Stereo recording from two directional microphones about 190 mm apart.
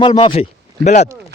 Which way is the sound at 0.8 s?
60° right (ahead or behind).